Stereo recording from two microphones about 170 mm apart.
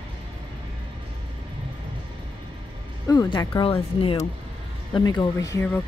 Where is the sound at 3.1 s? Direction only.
20° left (ahead or behind).